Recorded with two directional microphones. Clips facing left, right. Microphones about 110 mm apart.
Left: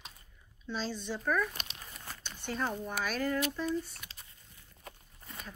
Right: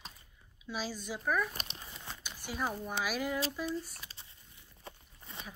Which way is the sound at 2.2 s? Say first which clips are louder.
Left 2 dB; 10° right (ahead or behind).